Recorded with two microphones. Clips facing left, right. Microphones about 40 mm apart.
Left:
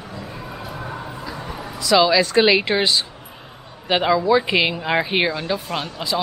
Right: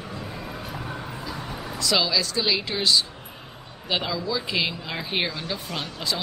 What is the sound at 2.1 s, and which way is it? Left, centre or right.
Speech, left.